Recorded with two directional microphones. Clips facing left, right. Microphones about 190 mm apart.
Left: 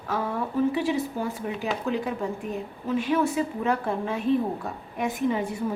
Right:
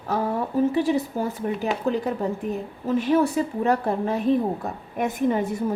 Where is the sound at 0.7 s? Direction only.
40° right (ahead or behind).